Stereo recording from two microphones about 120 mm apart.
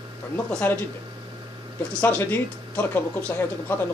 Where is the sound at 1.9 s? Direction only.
15° left (ahead or behind).